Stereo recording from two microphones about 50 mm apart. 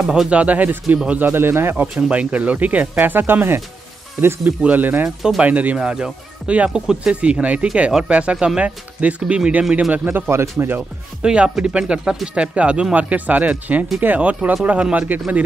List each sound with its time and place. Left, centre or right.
0.0 s speech: centre; by 1.0 s right
1.3 s speech: right
2.0 s speech: right
2.9 s speech: right
4.6 s speech: right
5.8 s speech: centre
6.4 s speech: right
6.7 s speech: centre
10.0 s speech: right
10.3 s speech: right
11.2 s speech: centre
12.4 s speech: right